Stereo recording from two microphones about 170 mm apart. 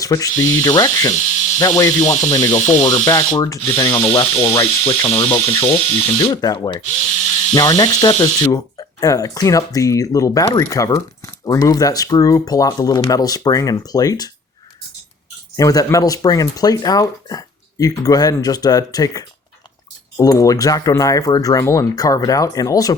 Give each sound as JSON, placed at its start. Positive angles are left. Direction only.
{"t": 0.0, "sound": "speech", "side_deg": 20}
{"t": 4.1, "sound": "speech", "side_deg": 30}
{"t": 15.5, "sound": "speech", "side_deg": 20}